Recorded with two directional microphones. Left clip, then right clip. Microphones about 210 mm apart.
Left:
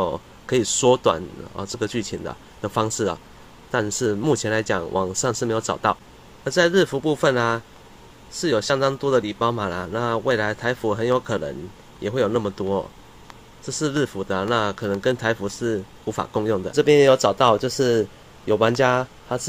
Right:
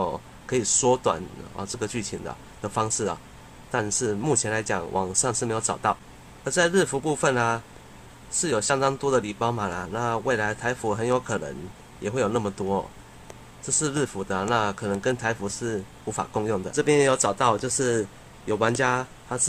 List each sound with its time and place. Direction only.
0.0 s speech: 20° left (ahead or behind)
4.0 s speech: 20° left (ahead or behind)